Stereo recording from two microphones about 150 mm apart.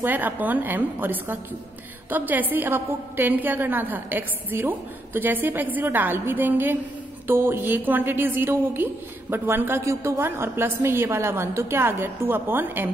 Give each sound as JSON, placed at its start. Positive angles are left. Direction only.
{"t": 0.0, "sound": "a woman's voice", "side_deg": -10}